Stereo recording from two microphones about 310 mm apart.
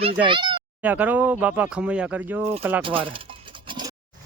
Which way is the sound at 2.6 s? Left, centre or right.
Centre.